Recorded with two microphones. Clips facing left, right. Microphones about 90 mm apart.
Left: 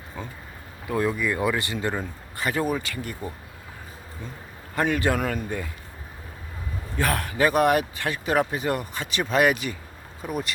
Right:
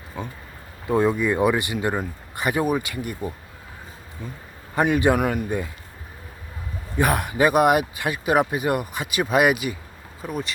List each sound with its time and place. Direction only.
0.1 s speech: 15° right (ahead or behind)
0.9 s speech: 25° right (ahead or behind)
4.7 s speech: 15° right (ahead or behind)
6.9 s speech: 15° right (ahead or behind)
10.2 s speech: 5° left (ahead or behind)